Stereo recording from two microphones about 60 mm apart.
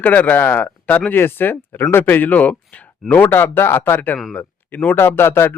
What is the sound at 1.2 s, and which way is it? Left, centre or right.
A man's voice, left.